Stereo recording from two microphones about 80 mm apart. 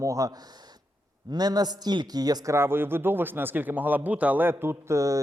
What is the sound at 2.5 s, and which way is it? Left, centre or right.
Speech, right.